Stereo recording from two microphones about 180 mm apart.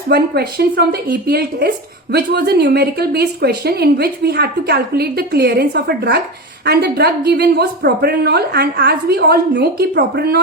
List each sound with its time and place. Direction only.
0.1 s speech: 60° right (ahead or behind)